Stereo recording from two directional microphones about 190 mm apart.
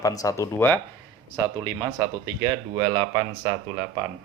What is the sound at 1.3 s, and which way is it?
Speech, 15° right (ahead or behind).